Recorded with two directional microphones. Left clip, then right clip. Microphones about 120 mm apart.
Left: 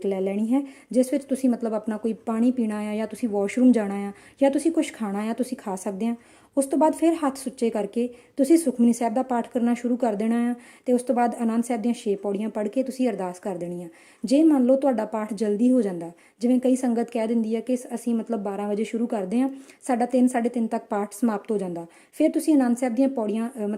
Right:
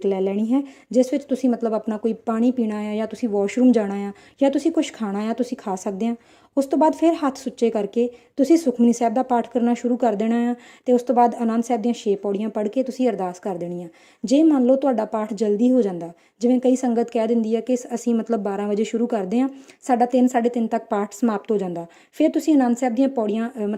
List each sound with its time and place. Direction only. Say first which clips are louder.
0.0 s speech: right 4 dB; 20° right (ahead or behind)